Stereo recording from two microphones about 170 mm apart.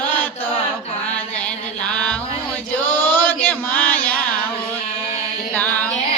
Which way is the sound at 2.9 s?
10° left (ahead or behind).